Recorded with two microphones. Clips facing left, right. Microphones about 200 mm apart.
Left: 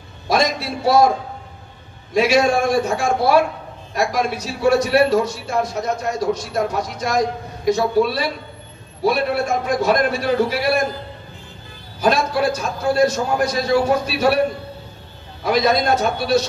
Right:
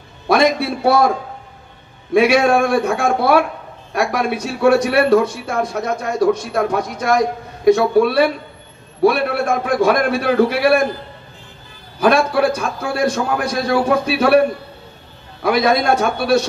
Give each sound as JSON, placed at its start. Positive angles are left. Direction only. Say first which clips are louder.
{"t": 0.3, "sound": "music", "louder": "right 5 dB", "side_deg": -60}
{"t": 2.1, "sound": "a man's voice", "louder": "right 3 dB", "side_deg": -55}
{"t": 12.0, "sound": "a man's voice", "louder": "right 4 dB", "side_deg": -60}
{"t": 15.4, "sound": "a man's voice", "louder": "right 2 dB", "side_deg": -55}